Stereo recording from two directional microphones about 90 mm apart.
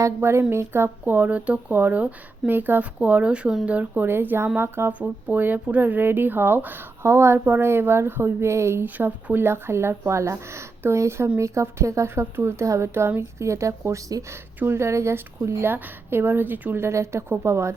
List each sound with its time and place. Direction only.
0.0 s a woman's voice: 30° right (ahead or behind)